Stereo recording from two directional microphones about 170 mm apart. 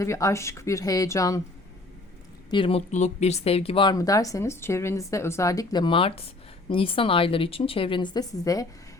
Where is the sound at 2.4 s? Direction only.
30° left (ahead or behind).